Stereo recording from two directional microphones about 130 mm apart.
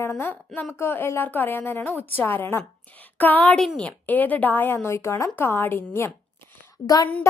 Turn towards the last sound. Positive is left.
turn(degrees=30)  # may be behind; listen again after turning